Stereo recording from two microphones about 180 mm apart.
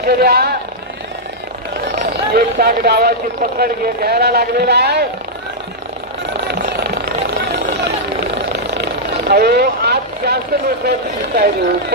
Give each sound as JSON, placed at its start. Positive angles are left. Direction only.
{"t": 0.0, "sound": "speech", "side_deg": -60}
{"t": 1.9, "sound": "vehicle", "side_deg": -65}
{"t": 2.6, "sound": "speech", "side_deg": -60}
{"t": 6.4, "sound": "vehicle", "side_deg": -60}
{"t": 10.9, "sound": "speech", "side_deg": -60}